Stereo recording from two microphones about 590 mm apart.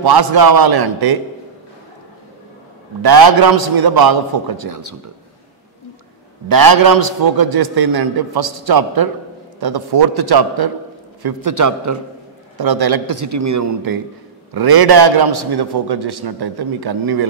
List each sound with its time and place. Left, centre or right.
0.0 s a man's voice: right
3.0 s a man's voice: right
6.5 s a man's voice: right